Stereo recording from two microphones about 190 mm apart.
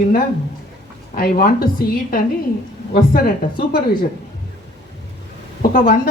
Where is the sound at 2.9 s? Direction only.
50° left (ahead or behind).